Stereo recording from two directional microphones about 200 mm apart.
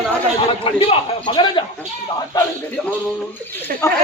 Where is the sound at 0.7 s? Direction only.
25° left (ahead or behind).